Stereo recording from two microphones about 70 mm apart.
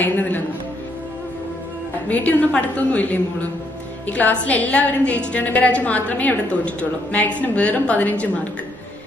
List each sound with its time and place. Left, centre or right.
0.0 s a woman's voice: left
2.0 s a woman's voice: left